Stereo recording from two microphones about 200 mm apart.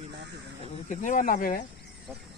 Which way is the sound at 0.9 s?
40° left (ahead or behind).